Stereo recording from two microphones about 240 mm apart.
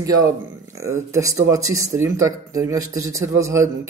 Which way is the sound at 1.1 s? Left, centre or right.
Centre.